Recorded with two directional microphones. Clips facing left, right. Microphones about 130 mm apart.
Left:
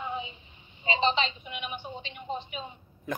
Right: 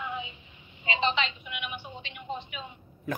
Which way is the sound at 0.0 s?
30° left (ahead or behind).